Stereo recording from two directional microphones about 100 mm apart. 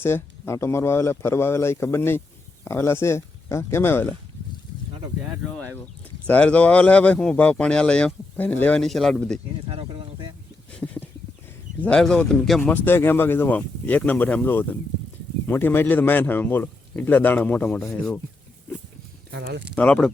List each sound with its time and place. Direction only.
0.0 s speech: 25° left (ahead or behind)
5.2 s speech: 10° right (ahead or behind)
5.5 s speech: 15° left (ahead or behind)
8.8 s speech: 5° left (ahead or behind)
9.6 s a sound: 75° right (ahead or behind)
10.8 s a sound: 15° left (ahead or behind)
11.8 s speech: 10° left (ahead or behind)
12.7 s speech: 20° left (ahead or behind)
19.7 s speech: 10° left (ahead or behind)